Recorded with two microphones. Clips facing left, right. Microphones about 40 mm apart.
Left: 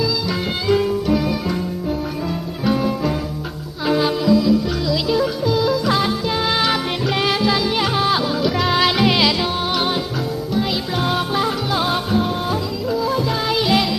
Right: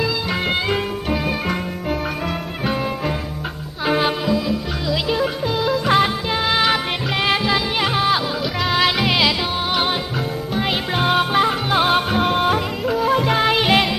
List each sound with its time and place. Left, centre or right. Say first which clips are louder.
0.7 s music: left 5 dB; right
2.6 s music: left 4 dB; right
6.4 s music: right 3 dB; centre
10.5 s music: right 1 dB; right